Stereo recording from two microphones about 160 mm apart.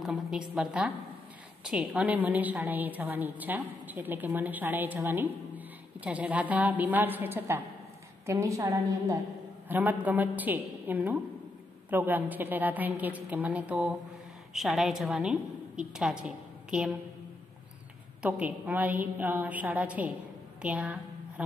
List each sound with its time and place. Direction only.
0.0 s a woman's voice: 5° right (ahead or behind)
18.2 s a woman's voice: 10° right (ahead or behind)